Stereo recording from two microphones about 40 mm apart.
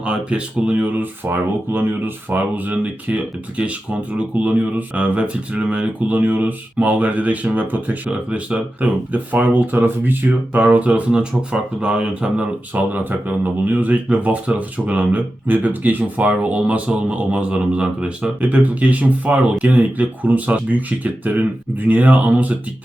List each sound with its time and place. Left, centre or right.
0.0 s speech: right
8.1 s speech: right
13.1 s speech: right
18.3 s speech: right